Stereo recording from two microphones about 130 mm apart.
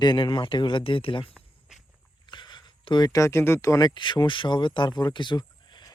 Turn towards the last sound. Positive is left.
turn(degrees=35)  # may be behind; listen again after turning